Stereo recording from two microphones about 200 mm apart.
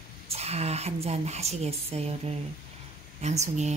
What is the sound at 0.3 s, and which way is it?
A woman's voice, 30° right (ahead or behind).